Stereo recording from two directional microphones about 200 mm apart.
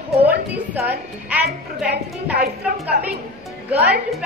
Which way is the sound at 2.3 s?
50° right (ahead or behind).